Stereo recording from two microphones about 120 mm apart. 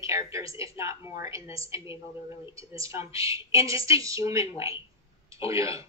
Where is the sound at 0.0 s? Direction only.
25° right (ahead or behind).